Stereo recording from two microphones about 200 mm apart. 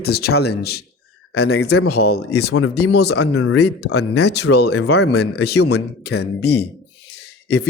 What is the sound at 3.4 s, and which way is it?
Speech, 90° left.